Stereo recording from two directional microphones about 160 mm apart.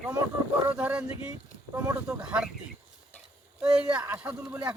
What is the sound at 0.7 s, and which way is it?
Speech, 10° right (ahead or behind).